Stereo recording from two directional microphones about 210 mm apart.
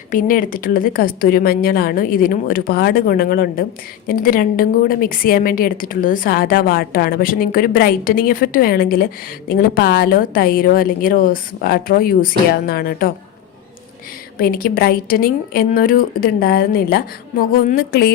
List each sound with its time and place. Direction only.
0.1 s a woman's voice: 40° left (ahead or behind)
14.3 s a woman's voice: 45° left (ahead or behind)